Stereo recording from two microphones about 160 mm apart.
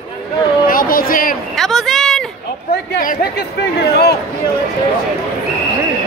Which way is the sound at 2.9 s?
65° left (ahead or behind).